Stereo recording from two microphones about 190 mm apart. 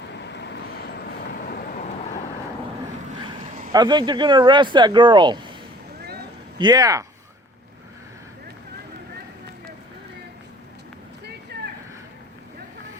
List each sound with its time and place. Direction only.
0.3 s vehicle: 60° left (ahead or behind)
3.7 s speech: 20° right (ahead or behind)
6.6 s speech: 20° right (ahead or behind)
11.5 s a sound: 60° right (ahead or behind)